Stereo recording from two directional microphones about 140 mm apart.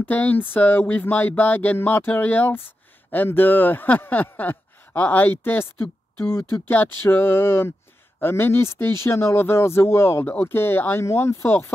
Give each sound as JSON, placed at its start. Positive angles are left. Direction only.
{"t": 0.0, "sound": "speech", "side_deg": 10}